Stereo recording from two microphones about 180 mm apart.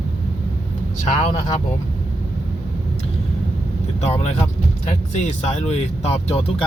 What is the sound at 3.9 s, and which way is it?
Speech, 35° left (ahead or behind).